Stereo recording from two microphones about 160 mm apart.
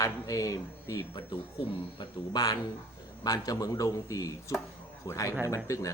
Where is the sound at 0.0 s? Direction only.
20° left (ahead or behind).